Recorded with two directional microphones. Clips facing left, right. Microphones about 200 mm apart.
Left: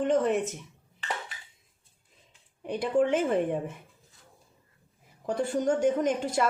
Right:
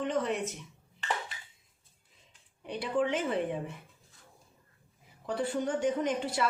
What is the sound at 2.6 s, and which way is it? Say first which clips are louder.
Speech: left 5 dB; 50° left (ahead or behind).